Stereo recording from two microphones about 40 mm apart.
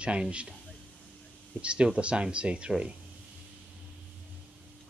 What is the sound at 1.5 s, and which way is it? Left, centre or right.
Speech, right.